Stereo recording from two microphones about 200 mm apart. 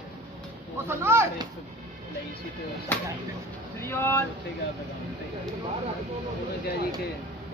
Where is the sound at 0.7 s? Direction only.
10° right (ahead or behind).